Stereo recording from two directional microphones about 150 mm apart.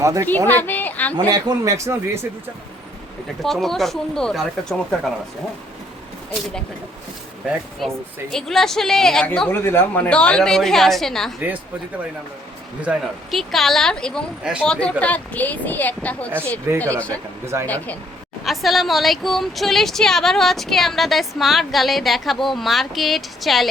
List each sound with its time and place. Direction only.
0.0 s speech: 20° right (ahead or behind)
0.4 s a sound: 10° left (ahead or behind)
1.3 s speech: 25° right (ahead or behind)
3.4 s a woman's voice: centre (ahead or behind)
7.8 s a woman's voice: centre (ahead or behind)
12.8 s a woman's voice: 5° right (ahead or behind)
17.4 s speech: 20° right (ahead or behind)
18.4 s a woman's voice: centre (ahead or behind)